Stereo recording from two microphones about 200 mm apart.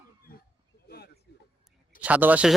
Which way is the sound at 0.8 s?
50° left (ahead or behind).